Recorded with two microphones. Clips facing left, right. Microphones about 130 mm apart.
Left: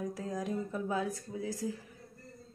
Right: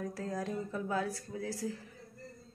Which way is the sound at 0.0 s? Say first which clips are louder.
Left 1 dB; 15° left (ahead or behind).